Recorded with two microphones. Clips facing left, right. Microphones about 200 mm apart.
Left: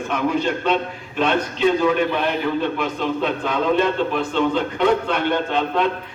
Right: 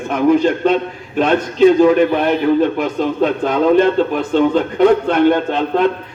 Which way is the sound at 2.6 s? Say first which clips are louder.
Right 7 dB; 45° right (ahead or behind).